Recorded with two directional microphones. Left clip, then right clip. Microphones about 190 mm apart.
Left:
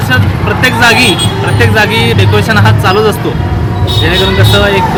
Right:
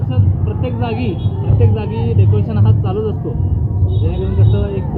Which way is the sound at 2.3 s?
45° left (ahead or behind).